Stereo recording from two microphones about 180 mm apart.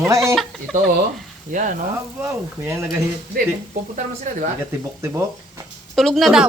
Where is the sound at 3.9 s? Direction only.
45° right (ahead or behind).